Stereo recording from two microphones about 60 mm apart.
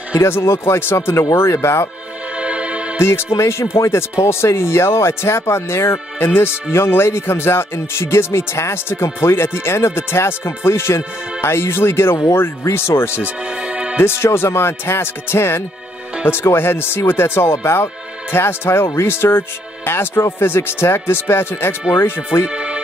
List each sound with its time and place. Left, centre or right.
0.1 s speech: left
2.3 s music: centre
3.0 s speech: left
13.2 s music: centre
13.9 s speech: left
22.5 s music: centre